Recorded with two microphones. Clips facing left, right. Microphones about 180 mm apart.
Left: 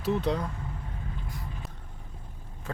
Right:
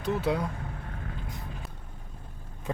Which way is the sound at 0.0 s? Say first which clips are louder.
Even; 5° right (ahead or behind).